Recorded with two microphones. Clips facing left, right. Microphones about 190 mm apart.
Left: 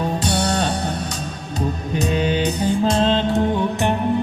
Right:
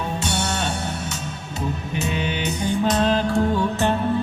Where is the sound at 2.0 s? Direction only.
35° left (ahead or behind).